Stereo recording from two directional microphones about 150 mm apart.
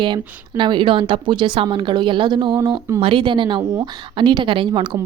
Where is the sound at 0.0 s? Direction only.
30° right (ahead or behind).